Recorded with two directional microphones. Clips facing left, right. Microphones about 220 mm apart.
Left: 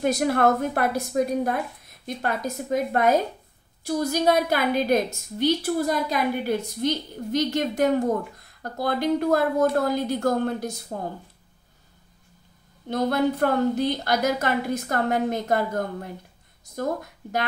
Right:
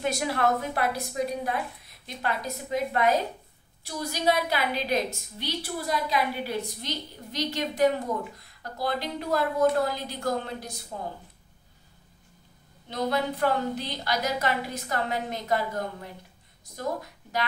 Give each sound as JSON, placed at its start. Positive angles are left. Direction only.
{"t": 0.0, "sound": "a woman's voice", "side_deg": 50}
{"t": 12.8, "sound": "a woman's voice", "side_deg": 50}